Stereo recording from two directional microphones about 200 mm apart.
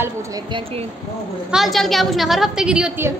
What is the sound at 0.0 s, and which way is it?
Speech, 20° right (ahead or behind).